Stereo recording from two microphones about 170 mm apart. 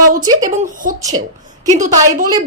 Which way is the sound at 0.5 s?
50° right (ahead or behind).